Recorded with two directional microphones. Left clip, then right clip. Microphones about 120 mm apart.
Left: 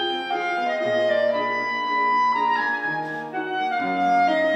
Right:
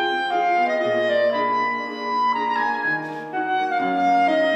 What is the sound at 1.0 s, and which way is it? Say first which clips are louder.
Clarinet: right 1 dB; 40° right (ahead or behind).